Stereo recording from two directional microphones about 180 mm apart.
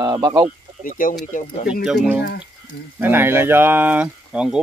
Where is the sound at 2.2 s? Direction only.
55° left (ahead or behind).